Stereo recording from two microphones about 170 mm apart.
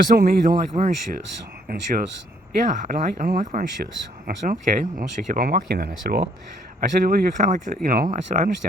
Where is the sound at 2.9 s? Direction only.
55° right (ahead or behind).